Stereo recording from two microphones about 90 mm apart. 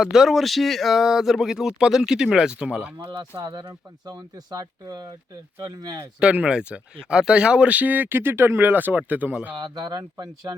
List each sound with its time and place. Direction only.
0.0 s speech: 5° right (ahead or behind)
3.1 s speech: 55° right (ahead or behind)
6.1 s speech: 15° right (ahead or behind)
9.6 s speech: 50° right (ahead or behind)